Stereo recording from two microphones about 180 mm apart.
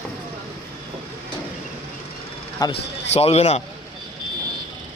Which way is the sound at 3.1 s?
35° left (ahead or behind).